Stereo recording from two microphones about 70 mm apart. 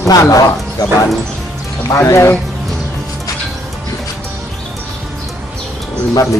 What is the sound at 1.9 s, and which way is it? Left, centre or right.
Speech, left.